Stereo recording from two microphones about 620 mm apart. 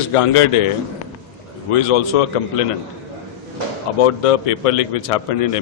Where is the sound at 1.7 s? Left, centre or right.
Left.